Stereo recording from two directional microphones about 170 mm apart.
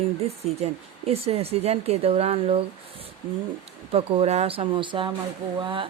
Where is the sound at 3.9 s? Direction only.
35° right (ahead or behind).